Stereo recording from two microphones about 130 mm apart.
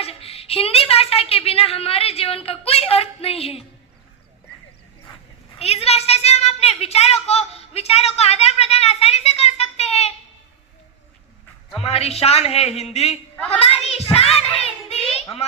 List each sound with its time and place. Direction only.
0.0 s a woman's voice: 50° left (ahead or behind)
5.5 s a woman's voice: 50° left (ahead or behind)
11.8 s a woman's voice: 50° left (ahead or behind)
14.3 s child singing: 50° left (ahead or behind)